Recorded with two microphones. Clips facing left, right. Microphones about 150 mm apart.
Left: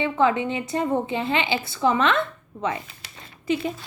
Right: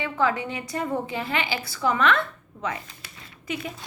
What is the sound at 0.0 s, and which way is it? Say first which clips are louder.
A woman's voice: left 4 dB; 25° left (ahead or behind).